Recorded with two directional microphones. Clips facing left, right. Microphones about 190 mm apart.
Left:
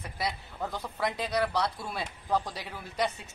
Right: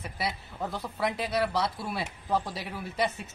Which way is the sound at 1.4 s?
5° right (ahead or behind).